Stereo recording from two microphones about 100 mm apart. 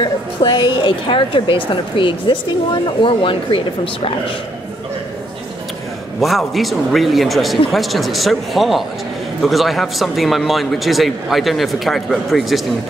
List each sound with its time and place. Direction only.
0.0 s a woman's voice: 50° left (ahead or behind)
6.2 s a man's voice: centre (ahead or behind)